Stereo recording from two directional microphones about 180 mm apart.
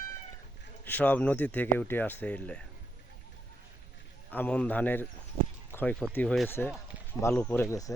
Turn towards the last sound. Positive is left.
turn(degrees=15)  # may be behind; listen again after turning